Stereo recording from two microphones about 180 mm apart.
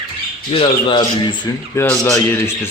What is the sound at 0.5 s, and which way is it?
Speech, 30° left (ahead or behind).